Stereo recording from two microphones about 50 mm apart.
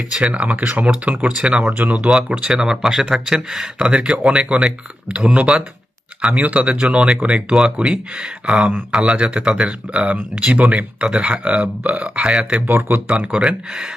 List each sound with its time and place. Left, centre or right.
0.1 s speech: right
2.4 s speech: centre
12.6 s speech: right
13.1 s speech: centre